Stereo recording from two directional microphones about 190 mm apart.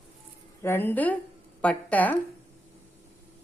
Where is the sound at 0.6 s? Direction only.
10° left (ahead or behind).